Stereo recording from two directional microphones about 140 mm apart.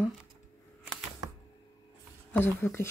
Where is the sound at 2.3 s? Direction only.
15° left (ahead or behind).